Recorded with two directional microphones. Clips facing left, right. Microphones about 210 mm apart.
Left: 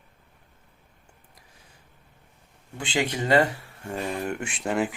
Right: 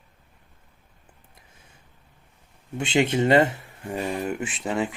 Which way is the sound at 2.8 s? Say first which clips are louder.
Right 6 dB; 25° right (ahead or behind).